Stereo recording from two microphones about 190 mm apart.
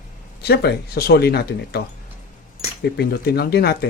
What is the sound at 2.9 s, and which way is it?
Speech, 55° left (ahead or behind).